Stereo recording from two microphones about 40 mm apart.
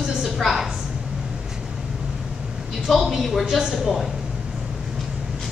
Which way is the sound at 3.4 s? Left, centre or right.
Centre.